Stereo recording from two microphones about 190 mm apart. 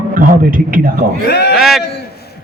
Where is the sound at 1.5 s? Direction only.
Centre (ahead or behind).